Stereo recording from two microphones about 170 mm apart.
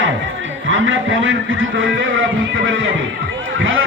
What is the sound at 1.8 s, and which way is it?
Speech, 90° right.